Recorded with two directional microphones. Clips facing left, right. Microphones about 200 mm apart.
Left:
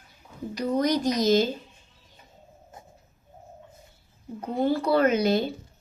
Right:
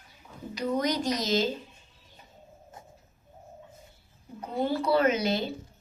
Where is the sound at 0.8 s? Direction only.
50° left (ahead or behind).